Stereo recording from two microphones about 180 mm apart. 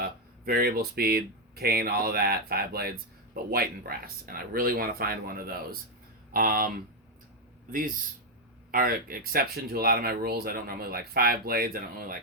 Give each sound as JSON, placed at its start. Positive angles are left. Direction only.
{"t": 0.0, "sound": "speech", "side_deg": -55}
{"t": 8.7, "sound": "speech", "side_deg": -55}